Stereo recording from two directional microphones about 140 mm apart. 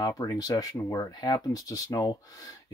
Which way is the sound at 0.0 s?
30° left (ahead or behind).